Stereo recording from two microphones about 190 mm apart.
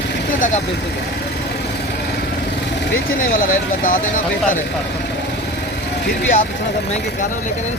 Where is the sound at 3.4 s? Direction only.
45° left (ahead or behind).